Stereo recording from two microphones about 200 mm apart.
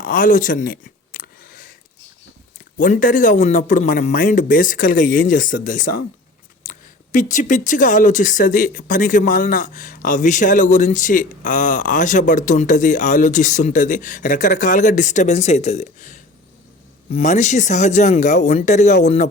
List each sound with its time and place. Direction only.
0.0 s a sound: 40° left (ahead or behind)
2.7 s speech: 40° left (ahead or behind)
7.1 s speech: 40° left (ahead or behind)